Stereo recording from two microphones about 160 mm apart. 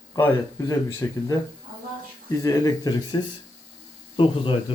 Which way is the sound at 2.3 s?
20° left (ahead or behind).